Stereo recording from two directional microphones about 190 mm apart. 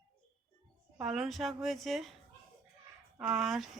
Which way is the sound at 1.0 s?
Centre (ahead or behind).